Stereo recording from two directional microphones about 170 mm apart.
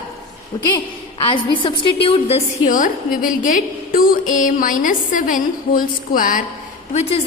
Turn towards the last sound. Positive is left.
turn(degrees=40)  # may be behind; listen again after turning